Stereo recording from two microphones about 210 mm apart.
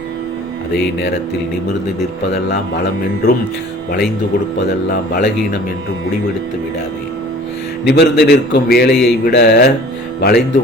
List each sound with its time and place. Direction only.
2.3 s a man's voice: 50° left (ahead or behind)
4.9 s a man's voice: 45° left (ahead or behind)
7.9 s a man's voice: 50° left (ahead or behind)